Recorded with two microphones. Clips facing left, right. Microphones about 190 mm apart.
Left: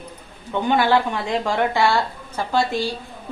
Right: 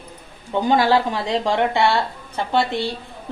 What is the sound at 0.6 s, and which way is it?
Speech, 35° right (ahead or behind).